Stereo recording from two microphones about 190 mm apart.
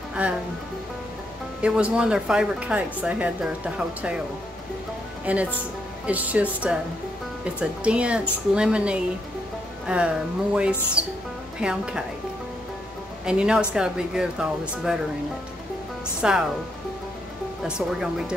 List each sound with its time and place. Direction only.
0.1 s speech: 5° right (ahead or behind)
1.6 s speech: 5° right (ahead or behind)
5.2 s speech: 5° right (ahead or behind)
11.0 s speech: 30° right (ahead or behind)
11.6 s speech: 5° right (ahead or behind)
13.2 s speech: 5° right (ahead or behind)
16.2 s speech: 5° right (ahead or behind)
17.6 s speech: 5° right (ahead or behind)